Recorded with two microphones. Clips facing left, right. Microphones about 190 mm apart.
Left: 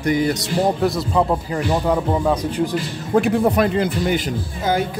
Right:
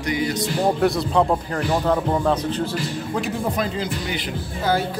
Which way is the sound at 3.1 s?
60° left (ahead or behind).